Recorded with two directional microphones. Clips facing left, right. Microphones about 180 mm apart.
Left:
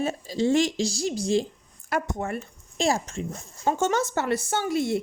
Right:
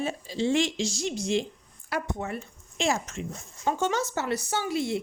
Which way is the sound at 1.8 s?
45° left (ahead or behind).